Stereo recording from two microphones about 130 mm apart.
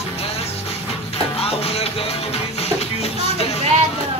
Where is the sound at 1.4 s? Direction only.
50° left (ahead or behind).